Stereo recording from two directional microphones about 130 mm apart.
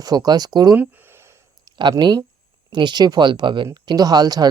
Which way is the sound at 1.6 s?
35° right (ahead or behind).